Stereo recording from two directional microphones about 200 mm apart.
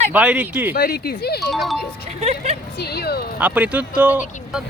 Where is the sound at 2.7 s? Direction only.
55° left (ahead or behind).